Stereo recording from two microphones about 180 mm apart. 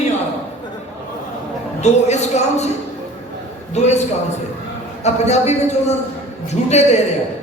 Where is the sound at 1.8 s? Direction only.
40° left (ahead or behind).